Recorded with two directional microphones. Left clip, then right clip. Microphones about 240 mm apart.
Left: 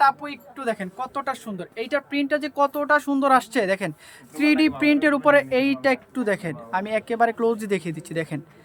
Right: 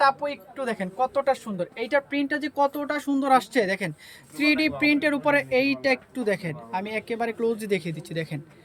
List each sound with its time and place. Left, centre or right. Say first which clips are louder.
0.0 s speech: left 2 dB; centre